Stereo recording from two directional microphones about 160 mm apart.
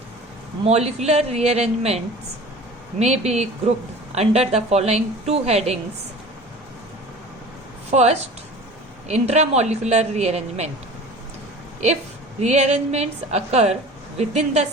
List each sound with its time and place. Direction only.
0.6 s a woman's voice: 40° right (ahead or behind)
3.0 s a woman's voice: 45° right (ahead or behind)
7.9 s a woman's voice: 45° right (ahead or behind)
12.4 s a woman's voice: 45° right (ahead or behind)